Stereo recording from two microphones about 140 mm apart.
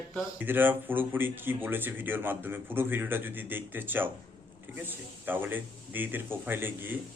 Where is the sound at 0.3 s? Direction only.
15° right (ahead or behind).